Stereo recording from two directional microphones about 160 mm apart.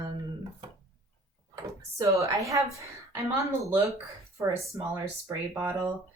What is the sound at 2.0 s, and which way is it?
Speech, 20° right (ahead or behind).